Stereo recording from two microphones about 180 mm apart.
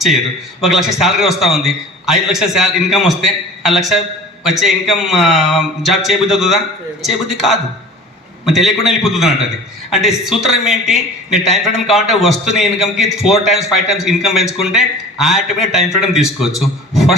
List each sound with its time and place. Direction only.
0.6 s a man's voice: centre (ahead or behind)